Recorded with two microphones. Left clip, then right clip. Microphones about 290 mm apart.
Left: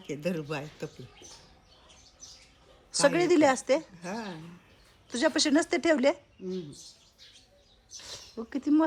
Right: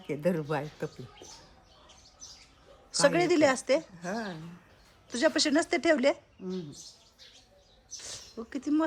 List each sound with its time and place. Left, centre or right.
0.1 s a woman's voice: centre
2.9 s a woman's voice: centre
8.0 s speech: centre